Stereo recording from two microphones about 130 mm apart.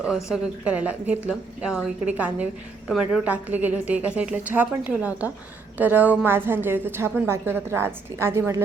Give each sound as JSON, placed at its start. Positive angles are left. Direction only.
{"t": 0.3, "sound": "a woman's voice", "side_deg": -10}